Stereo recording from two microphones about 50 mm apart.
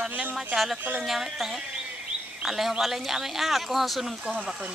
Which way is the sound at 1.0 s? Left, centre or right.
Centre.